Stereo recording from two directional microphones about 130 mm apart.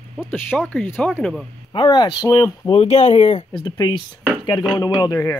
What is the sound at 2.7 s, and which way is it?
Speech, 60° left (ahead or behind).